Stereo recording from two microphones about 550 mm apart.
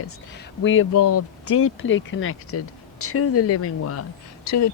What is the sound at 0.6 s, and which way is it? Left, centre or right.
Speech, left.